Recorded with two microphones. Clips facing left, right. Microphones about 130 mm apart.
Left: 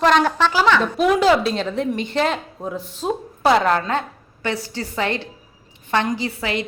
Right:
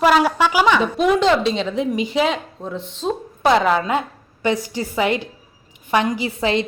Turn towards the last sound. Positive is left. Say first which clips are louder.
# right 5 dB
turn(degrees=-25)  # may be behind; listen again after turning